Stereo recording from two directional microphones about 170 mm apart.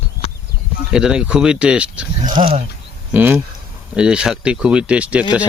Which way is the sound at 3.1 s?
10° right (ahead or behind).